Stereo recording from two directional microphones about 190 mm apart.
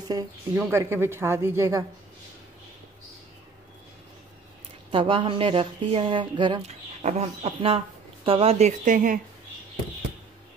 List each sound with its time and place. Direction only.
0.1 s speech: 20° right (ahead or behind)
4.9 s speech: 25° right (ahead or behind)
7.0 s speech: 35° right (ahead or behind)